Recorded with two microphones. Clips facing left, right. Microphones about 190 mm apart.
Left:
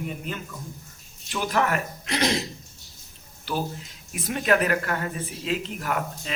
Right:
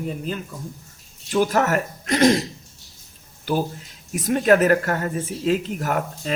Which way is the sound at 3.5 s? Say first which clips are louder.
Right 6 dB; 45° right (ahead or behind).